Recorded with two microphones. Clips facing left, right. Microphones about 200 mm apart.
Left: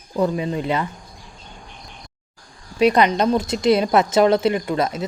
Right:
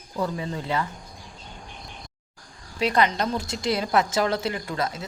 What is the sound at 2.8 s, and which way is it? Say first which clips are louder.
Speech: left 7 dB; 20° left (ahead or behind).